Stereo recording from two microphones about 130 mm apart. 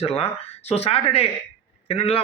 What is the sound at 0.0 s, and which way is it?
Speech, 50° left (ahead or behind).